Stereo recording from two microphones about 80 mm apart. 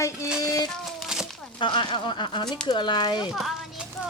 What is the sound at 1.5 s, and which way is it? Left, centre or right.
Speech, left.